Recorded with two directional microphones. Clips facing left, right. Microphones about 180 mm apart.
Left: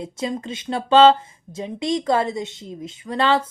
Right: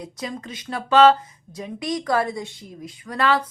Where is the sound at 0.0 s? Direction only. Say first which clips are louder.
Left 5 dB; 25° left (ahead or behind).